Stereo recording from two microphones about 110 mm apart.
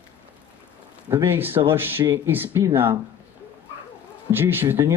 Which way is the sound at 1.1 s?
20° right (ahead or behind).